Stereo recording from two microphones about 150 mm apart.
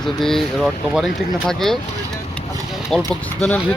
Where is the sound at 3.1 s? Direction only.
10° left (ahead or behind).